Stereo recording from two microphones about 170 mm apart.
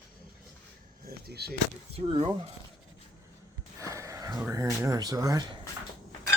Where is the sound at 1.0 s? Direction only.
65° right (ahead or behind).